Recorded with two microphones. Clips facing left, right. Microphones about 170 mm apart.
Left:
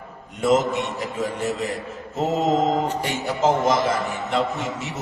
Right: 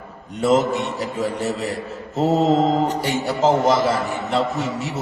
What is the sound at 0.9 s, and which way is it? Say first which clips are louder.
A man's voice: right 3 dB; 35° right (ahead or behind).